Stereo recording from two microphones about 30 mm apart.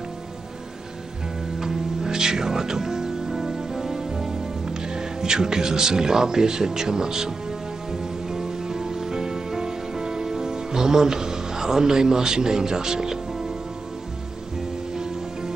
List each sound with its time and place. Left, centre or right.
1.6 s music: centre